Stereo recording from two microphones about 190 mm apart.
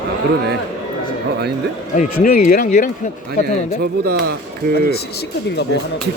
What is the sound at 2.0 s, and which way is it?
Speech, 50° left (ahead or behind).